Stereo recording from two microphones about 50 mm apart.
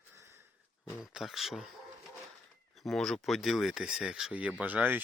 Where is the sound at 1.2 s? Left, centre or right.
Centre.